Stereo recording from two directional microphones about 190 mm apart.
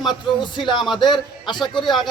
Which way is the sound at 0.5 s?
25° left (ahead or behind).